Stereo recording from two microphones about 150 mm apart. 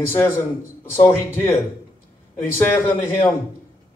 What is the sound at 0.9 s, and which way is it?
Speech, 15° left (ahead or behind).